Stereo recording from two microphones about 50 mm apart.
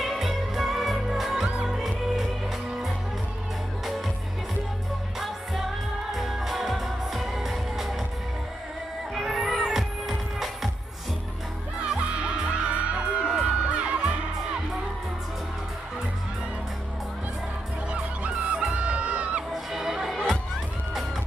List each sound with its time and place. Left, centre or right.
0.0 s music: centre
5.2 s music: centre
9.1 s music: centre
11.9 s music: centre
17.9 s music: right
19.5 s music: centre